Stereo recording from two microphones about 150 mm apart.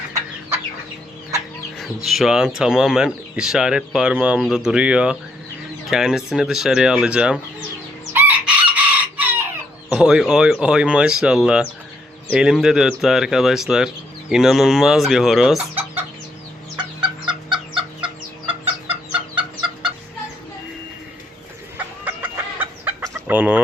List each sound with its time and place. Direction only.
1.8 s speech: centre (ahead or behind)
8.1 s chicken: 10° right (ahead or behind)
9.9 s speech: 5° right (ahead or behind)
16.7 s chicken: 30° right (ahead or behind)
21.8 s chicken: 15° right (ahead or behind)